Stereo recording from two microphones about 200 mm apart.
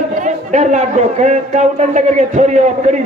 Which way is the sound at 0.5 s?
35° right (ahead or behind).